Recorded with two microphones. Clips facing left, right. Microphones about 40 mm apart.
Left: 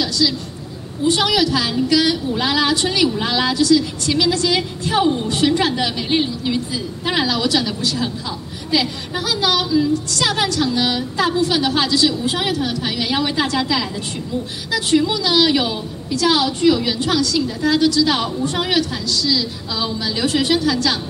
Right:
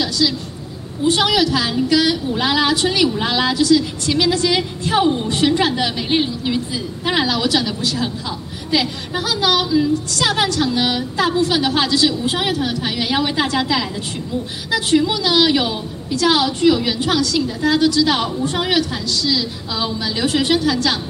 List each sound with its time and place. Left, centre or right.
0.2 s a woman's voice: centre
7.8 s a woman's voice: centre
17.2 s a woman's voice: right; by 20.8 s centre